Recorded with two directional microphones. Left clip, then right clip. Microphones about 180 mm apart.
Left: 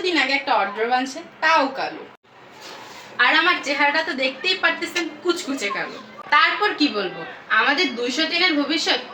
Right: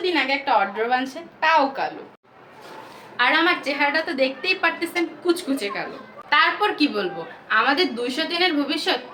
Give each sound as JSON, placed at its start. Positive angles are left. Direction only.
{"t": 0.0, "sound": "a woman's voice", "side_deg": -5}
{"t": 3.2, "sound": "a woman's voice", "side_deg": -35}